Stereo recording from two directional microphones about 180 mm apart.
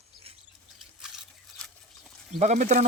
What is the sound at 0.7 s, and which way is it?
Trickle, 5° right (ahead or behind).